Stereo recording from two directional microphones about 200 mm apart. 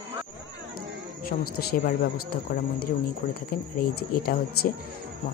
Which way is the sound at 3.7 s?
50° left (ahead or behind).